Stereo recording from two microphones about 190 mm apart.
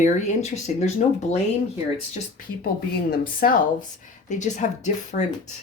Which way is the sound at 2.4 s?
45° left (ahead or behind).